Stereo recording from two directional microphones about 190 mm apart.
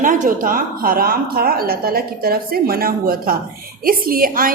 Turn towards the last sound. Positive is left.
turn(degrees=-50)  # may be behind; listen again after turning